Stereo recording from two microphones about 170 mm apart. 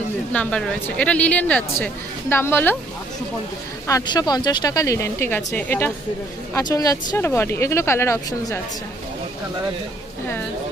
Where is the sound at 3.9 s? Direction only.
20° left (ahead or behind).